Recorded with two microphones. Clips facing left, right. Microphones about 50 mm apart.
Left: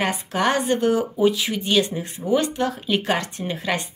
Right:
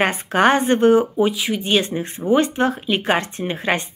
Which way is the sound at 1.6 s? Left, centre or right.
Right.